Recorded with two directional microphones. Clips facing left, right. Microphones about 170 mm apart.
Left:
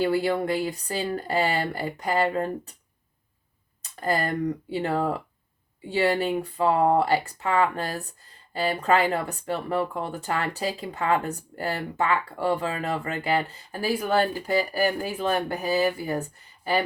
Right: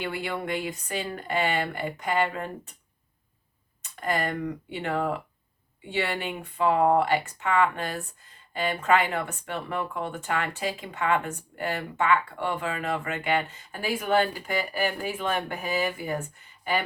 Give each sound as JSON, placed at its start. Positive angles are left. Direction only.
{"t": 0.0, "sound": "speech", "side_deg": 35}
{"t": 4.0, "sound": "speech", "side_deg": 35}